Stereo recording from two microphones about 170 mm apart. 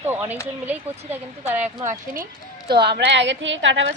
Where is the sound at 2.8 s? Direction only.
80° right.